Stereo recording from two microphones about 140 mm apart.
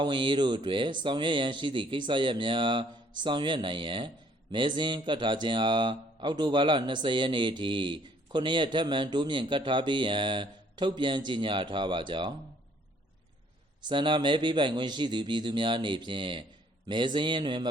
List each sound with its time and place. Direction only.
0.0 s speech: 35° right (ahead or behind)
13.8 s speech: 35° right (ahead or behind)